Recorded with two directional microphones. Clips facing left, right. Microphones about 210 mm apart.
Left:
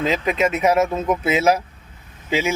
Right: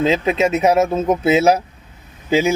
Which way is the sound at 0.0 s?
25° right (ahead or behind).